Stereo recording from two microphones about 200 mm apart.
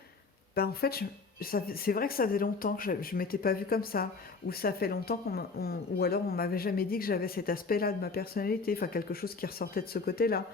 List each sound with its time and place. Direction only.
0.5 s speech: 50° left (ahead or behind)